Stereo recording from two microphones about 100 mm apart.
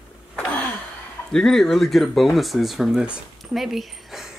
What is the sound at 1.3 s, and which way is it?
Speech, 5° left (ahead or behind).